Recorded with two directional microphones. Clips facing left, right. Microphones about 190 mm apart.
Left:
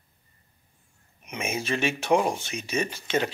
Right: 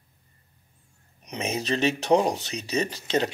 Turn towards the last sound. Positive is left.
turn(degrees=-35)  # may be behind; listen again after turning